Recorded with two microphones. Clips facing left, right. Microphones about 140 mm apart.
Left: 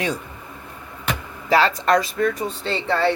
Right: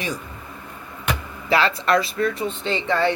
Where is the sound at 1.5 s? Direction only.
40° left (ahead or behind).